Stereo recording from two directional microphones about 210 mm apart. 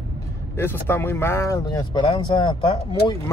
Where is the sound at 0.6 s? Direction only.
10° left (ahead or behind).